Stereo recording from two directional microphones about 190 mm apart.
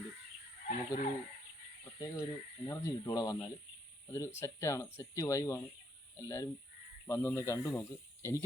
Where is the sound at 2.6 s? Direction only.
15° left (ahead or behind).